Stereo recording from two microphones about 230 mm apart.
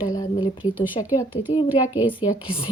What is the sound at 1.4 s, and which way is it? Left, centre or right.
Speech, centre.